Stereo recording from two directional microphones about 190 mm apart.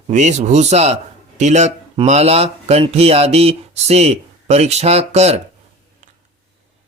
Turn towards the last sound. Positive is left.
turn(degrees=-35)  # may be behind; listen again after turning